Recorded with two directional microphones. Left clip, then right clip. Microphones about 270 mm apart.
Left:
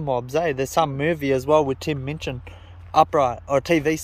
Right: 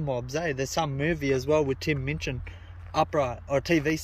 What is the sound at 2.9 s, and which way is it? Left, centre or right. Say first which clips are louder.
Speech: left 8 dB; centre.